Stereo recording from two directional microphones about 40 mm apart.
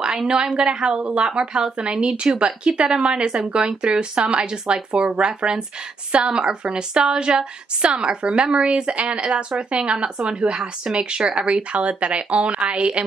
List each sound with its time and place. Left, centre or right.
0.6 s a woman's voice: right